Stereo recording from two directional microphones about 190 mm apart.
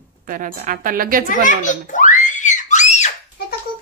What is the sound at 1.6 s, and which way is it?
Screaming, 40° left (ahead or behind).